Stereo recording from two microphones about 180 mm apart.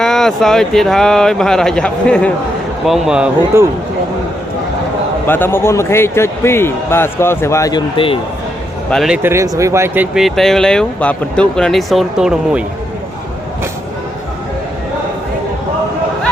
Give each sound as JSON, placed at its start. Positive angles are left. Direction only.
{"t": 0.0, "sound": "speech", "side_deg": 5}
{"t": 3.5, "sound": "speech", "side_deg": -15}
{"t": 5.2, "sound": "a man's voice", "side_deg": 10}
{"t": 7.9, "sound": "speech", "side_deg": 30}
{"t": 8.9, "sound": "speech", "side_deg": 0}